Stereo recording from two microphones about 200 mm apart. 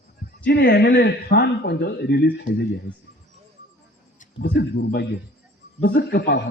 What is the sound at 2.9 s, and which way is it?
Speech, 25° left (ahead or behind).